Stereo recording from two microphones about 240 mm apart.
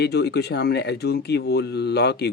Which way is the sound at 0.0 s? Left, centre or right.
Left.